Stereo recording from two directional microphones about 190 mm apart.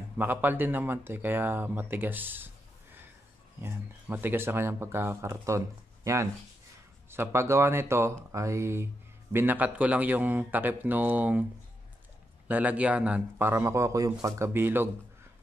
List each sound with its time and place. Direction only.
0.2 s speech: 10° right (ahead or behind)
12.4 s speech: 10° right (ahead or behind)